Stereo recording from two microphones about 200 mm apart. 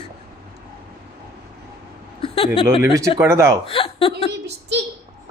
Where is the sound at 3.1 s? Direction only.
15° right (ahead or behind).